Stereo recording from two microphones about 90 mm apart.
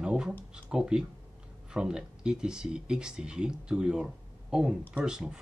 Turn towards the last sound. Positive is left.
turn(degrees=-10)  # may be behind; listen again after turning